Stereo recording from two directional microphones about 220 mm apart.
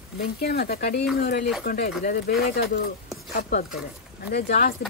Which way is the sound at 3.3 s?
45° left (ahead or behind).